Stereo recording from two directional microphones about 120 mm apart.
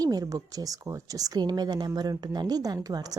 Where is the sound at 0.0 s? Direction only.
30° right (ahead or behind).